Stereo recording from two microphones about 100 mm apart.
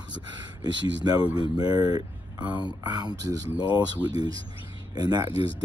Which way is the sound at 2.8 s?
45° right (ahead or behind).